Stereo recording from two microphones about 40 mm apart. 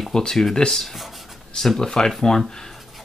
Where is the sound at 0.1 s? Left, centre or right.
Centre.